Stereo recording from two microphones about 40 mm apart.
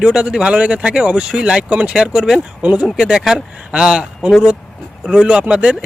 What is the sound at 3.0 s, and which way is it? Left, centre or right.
Speech, centre.